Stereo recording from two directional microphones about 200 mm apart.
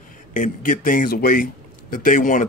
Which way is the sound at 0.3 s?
40° left (ahead or behind).